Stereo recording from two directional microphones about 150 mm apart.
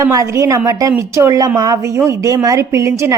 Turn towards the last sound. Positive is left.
turn(degrees=-20)  # may be behind; listen again after turning